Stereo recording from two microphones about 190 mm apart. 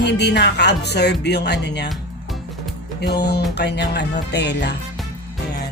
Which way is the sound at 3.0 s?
60° left (ahead or behind).